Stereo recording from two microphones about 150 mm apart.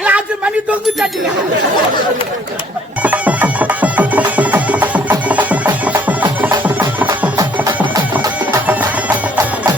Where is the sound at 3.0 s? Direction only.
10° right (ahead or behind).